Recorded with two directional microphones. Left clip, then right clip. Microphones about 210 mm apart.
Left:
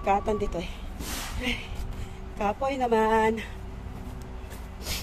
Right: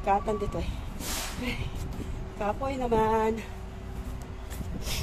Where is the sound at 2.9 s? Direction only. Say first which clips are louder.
Left 1 dB; 25° left (ahead or behind).